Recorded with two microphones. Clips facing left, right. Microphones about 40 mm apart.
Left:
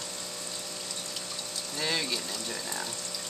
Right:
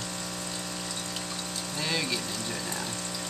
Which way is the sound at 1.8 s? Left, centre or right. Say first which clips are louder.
Even; centre.